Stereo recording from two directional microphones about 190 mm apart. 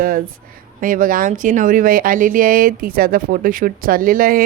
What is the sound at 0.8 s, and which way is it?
Speech, 45° right (ahead or behind).